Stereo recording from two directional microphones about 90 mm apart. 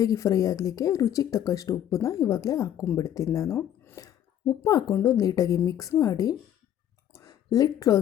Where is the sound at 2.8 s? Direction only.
25° left (ahead or behind).